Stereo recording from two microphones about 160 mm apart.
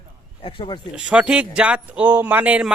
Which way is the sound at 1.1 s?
5° right (ahead or behind).